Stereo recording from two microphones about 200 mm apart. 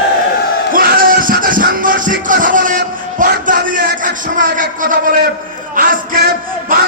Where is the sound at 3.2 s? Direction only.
40° right (ahead or behind).